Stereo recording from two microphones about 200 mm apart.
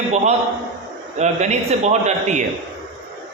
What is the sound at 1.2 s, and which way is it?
A man's voice, 35° right (ahead or behind).